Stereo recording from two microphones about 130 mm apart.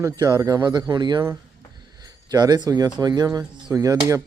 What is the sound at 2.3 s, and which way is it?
A man's voice, 30° right (ahead or behind).